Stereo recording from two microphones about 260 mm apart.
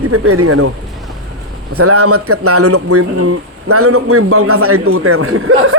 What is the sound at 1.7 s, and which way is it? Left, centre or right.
Speech, right.